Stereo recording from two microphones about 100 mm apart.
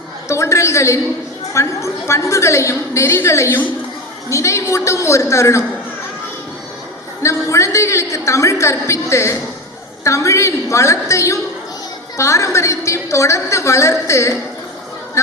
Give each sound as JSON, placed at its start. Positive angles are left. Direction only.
{"t": 0.3, "sound": "a woman's voice", "side_deg": 30}
{"t": 7.2, "sound": "a sound", "side_deg": 30}
{"t": 10.0, "sound": "a woman's voice", "side_deg": 30}